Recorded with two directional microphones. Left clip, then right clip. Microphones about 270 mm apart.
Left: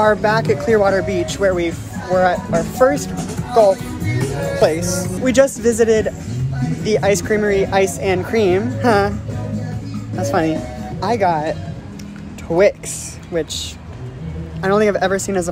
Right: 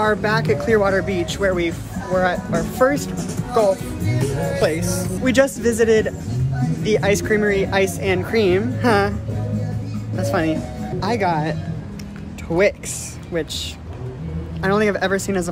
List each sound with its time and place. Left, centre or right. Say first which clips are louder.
0.0 s speech: left 4 dB; centre
3.7 s speech: left 2 dB; left
4.6 s speech: left 6 dB; centre
10.1 s speech: left 3 dB; centre
13.3 s speech: left 3 dB; centre